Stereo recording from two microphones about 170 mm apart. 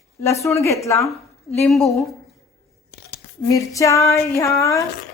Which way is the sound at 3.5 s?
20° left (ahead or behind).